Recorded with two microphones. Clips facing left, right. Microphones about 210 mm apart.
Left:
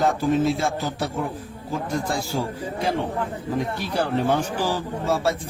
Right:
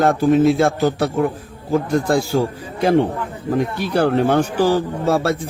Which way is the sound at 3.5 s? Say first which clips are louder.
Right 7 dB; 70° right (ahead or behind).